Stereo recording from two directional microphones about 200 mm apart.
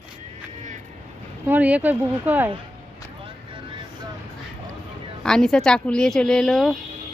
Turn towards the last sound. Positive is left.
turn(degrees=0)  # may be behind; listen again after turning